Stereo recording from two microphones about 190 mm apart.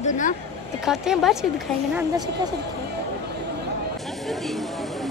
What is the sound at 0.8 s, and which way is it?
Speech, centre (ahead or behind).